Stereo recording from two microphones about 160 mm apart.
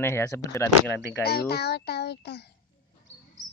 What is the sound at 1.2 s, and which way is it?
A child's voice, 80° left.